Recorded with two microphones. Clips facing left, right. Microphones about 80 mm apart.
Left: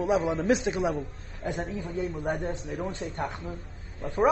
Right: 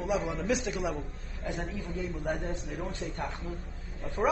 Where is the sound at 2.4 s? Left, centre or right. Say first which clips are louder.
Left 4 dB; left.